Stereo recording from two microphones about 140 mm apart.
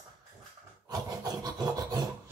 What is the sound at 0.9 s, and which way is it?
Filing, 30° right (ahead or behind).